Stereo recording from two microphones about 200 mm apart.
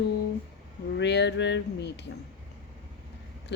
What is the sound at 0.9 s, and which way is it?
Speech, 60° left (ahead or behind).